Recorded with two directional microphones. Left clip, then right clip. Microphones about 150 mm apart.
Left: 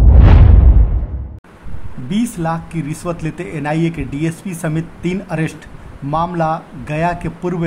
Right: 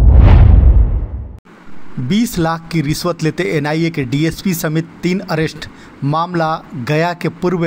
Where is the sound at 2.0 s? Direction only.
30° right (ahead or behind).